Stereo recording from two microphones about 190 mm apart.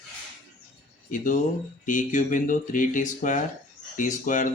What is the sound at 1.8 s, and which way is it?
Speech, 45° left (ahead or behind).